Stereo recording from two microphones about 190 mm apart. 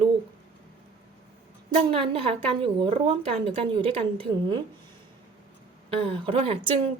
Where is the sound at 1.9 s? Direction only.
30° right (ahead or behind).